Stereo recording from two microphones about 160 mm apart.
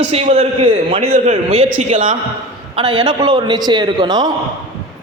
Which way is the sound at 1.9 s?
55° right (ahead or behind).